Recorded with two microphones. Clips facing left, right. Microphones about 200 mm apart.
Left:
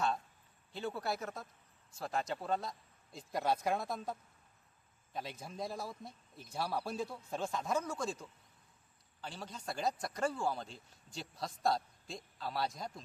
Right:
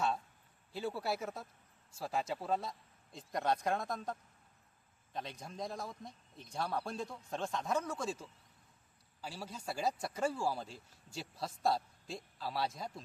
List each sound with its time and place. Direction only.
0.7 s speech: 5° right (ahead or behind)